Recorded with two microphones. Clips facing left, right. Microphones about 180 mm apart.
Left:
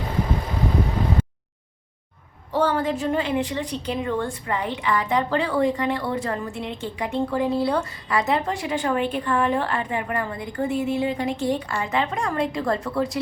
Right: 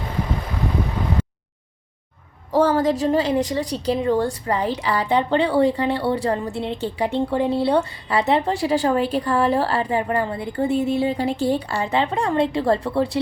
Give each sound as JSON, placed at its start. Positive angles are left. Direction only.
{"t": 2.5, "sound": "a woman's voice", "side_deg": -40}